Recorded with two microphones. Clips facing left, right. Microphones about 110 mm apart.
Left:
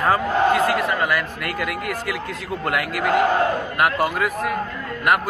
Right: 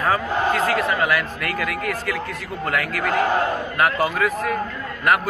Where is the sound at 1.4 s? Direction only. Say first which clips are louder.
Right 1 dB; 10° left (ahead or behind).